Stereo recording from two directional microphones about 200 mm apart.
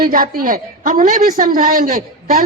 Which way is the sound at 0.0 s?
45° right (ahead or behind).